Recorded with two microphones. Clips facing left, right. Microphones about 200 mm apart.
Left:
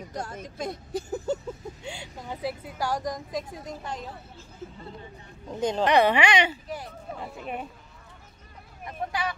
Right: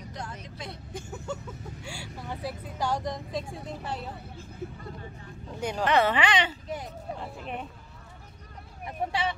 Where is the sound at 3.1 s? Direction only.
30° right (ahead or behind).